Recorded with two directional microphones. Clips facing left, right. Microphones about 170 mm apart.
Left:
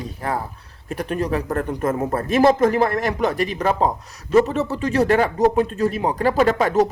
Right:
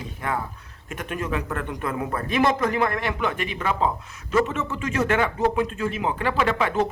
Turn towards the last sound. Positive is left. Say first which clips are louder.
# left 6 dB
turn(degrees=40)  # may be behind; listen again after turning